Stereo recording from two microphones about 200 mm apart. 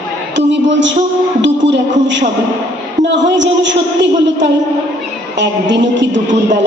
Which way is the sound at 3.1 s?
65° right (ahead or behind).